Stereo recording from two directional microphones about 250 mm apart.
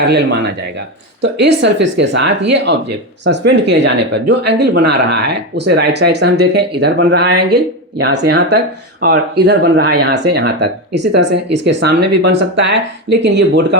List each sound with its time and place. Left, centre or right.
0.1 s speech: right